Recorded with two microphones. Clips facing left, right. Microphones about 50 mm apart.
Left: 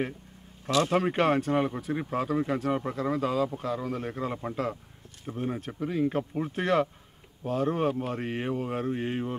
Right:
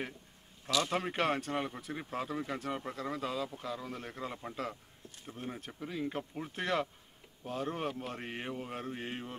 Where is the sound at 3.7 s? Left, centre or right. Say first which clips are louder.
Left 9 dB; left.